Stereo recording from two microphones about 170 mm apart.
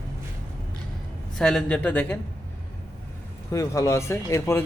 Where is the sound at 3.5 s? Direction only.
20° left (ahead or behind).